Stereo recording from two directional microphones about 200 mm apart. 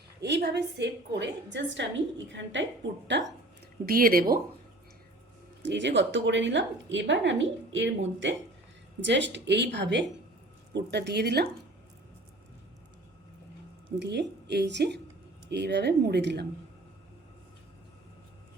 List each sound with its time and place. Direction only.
0.2 s a woman's voice: 60° right (ahead or behind)
3.8 s speech: 45° right (ahead or behind)
5.6 s a woman's voice: 65° right (ahead or behind)
14.0 s a woman's voice: 55° right (ahead or behind)